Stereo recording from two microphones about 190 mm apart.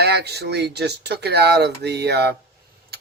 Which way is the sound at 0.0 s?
60° right (ahead or behind).